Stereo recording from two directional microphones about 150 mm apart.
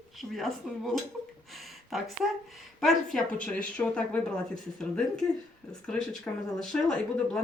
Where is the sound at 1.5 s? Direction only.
Centre (ahead or behind).